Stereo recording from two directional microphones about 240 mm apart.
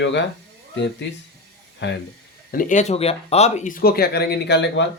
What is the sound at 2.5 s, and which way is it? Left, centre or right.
Speech, left.